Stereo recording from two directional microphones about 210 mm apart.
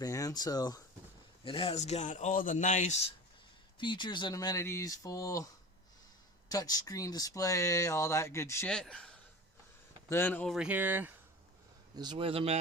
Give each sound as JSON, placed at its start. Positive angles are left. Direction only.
{"t": 0.0, "sound": "speech", "side_deg": 15}
{"t": 3.8, "sound": "speech", "side_deg": 20}
{"t": 6.5, "sound": "speech", "side_deg": 15}
{"t": 11.9, "sound": "a man's voice", "side_deg": -25}